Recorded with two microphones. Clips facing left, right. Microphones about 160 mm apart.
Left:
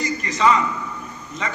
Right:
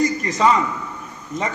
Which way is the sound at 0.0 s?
45° right (ahead or behind).